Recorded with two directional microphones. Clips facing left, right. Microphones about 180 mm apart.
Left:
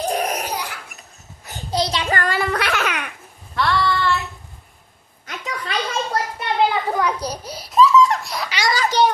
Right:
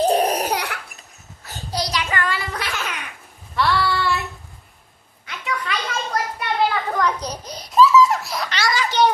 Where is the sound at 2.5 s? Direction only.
65° left (ahead or behind).